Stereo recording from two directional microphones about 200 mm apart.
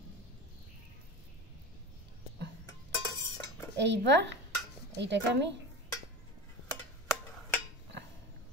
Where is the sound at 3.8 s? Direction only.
60° right (ahead or behind).